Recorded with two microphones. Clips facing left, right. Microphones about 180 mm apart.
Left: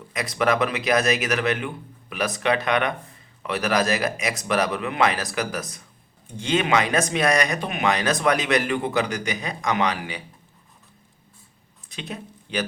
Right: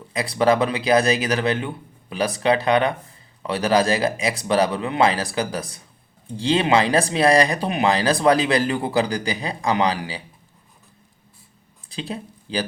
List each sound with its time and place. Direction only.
0.1 s speech: 30° right (ahead or behind)
11.9 s speech: 30° right (ahead or behind)